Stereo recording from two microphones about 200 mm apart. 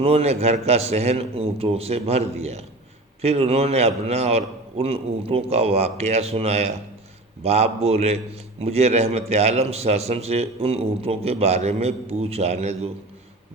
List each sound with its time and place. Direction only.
0.0 s a man's voice: 30° right (ahead or behind)